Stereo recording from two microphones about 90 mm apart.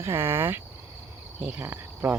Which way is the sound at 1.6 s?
25° right (ahead or behind).